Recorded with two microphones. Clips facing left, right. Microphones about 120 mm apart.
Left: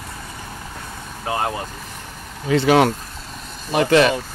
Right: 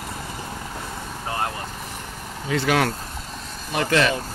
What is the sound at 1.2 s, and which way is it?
Vehicle, 10° left (ahead or behind).